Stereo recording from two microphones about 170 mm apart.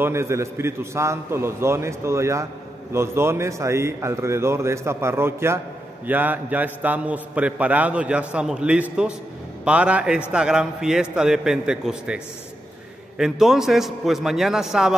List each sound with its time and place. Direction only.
0.0 s a man's voice: 15° right (ahead or behind)
13.2 s a man's voice: centre (ahead or behind)